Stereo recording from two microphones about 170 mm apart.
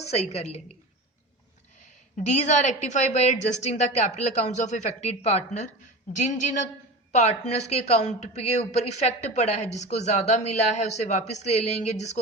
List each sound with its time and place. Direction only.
0.0 s a woman's voice: 40° left (ahead or behind)
2.1 s a woman's voice: 40° left (ahead or behind)